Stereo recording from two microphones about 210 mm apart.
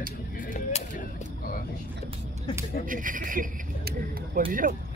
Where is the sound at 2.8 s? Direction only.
40° right (ahead or behind).